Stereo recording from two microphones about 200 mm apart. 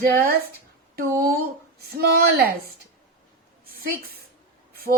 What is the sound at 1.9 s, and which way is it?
Speech, 50° right (ahead or behind).